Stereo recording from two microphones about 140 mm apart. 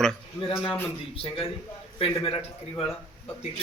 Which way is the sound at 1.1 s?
40° left (ahead or behind).